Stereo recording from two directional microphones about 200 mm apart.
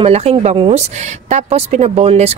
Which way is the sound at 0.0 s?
30° right (ahead or behind).